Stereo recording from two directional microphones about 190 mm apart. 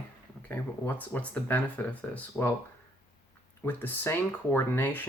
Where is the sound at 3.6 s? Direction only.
10° left (ahead or behind).